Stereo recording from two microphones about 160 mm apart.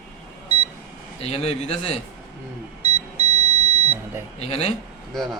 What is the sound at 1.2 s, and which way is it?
Speech, 40° left (ahead or behind).